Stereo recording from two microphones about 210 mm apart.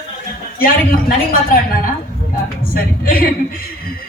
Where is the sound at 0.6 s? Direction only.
45° left (ahead or behind).